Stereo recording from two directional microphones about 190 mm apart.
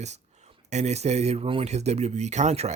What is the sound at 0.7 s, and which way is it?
Speech, 35° right (ahead or behind).